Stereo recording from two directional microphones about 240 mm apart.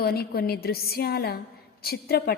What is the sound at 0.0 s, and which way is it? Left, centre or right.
A woman's voice, left.